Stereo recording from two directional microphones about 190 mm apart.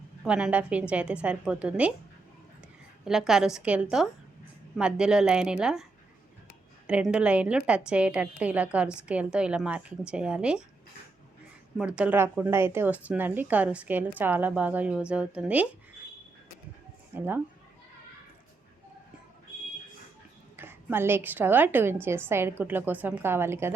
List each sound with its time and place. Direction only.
0.3 s speech: 5° right (ahead or behind)
3.0 s a woman's voice: centre (ahead or behind)
6.8 s a woman's voice: 5° right (ahead or behind)
11.8 s speech: 5° right (ahead or behind)
17.2 s speech: 10° right (ahead or behind)
20.6 s speech: 10° right (ahead or behind)